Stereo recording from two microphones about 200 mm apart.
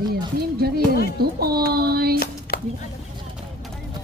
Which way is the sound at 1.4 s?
50° right (ahead or behind).